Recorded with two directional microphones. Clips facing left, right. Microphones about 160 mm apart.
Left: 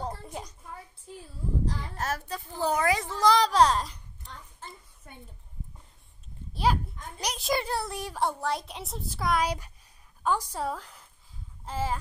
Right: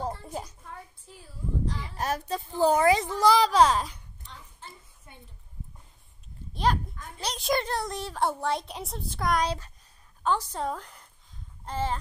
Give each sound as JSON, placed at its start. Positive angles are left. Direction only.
{"t": 0.0, "sound": "a sound", "side_deg": -5}
{"t": 2.0, "sound": "a child's voice", "side_deg": -15}
{"t": 3.2, "sound": "a child's voice", "side_deg": -5}
{"t": 6.5, "sound": "a sound", "side_deg": 5}
{"t": 7.1, "sound": "a woman's voice", "side_deg": 10}
{"t": 8.2, "sound": "a child's voice", "side_deg": 0}